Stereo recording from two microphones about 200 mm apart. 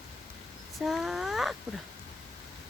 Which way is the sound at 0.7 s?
Centre (ahead or behind).